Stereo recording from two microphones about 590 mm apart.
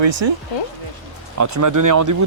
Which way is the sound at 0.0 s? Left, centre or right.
Right.